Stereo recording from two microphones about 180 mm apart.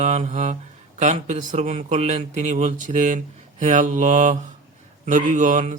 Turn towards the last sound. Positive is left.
turn(degrees=-45)  # may be behind; listen again after turning